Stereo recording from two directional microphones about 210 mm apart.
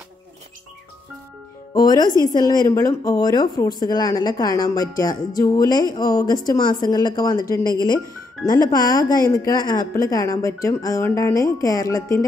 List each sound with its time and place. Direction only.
1.7 s a woman's voice: 20° left (ahead or behind)